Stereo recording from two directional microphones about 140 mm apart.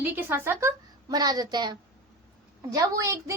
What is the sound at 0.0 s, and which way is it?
Speech, 15° right (ahead or behind).